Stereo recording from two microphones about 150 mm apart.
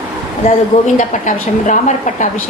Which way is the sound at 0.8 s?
55° left (ahead or behind).